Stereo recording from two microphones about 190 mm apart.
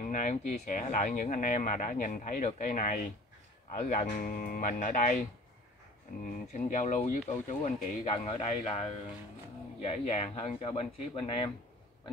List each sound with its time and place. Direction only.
0.1 s speech: 40° left (ahead or behind)
6.5 s speech: 40° left (ahead or behind)